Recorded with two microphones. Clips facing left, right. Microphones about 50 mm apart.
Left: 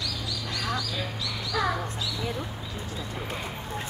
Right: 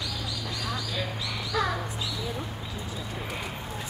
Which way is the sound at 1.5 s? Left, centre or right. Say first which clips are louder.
Left 1 dB; centre.